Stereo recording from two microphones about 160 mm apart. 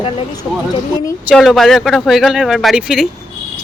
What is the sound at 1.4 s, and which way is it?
Speech, centre (ahead or behind).